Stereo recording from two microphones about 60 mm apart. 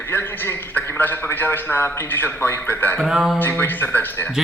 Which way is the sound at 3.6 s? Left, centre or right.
Left.